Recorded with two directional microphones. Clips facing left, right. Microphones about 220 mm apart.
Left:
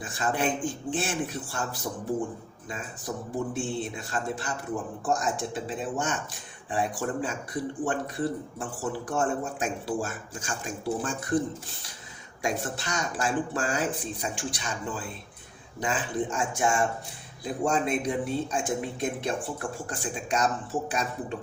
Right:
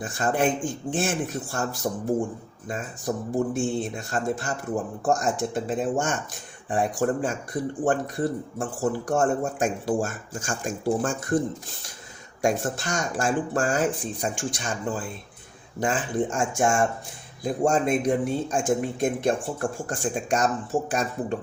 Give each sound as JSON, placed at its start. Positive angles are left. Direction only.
{"t": 0.0, "sound": "speech", "side_deg": -45}
{"t": 3.1, "sound": "speech", "side_deg": -45}
{"t": 12.4, "sound": "speech", "side_deg": -45}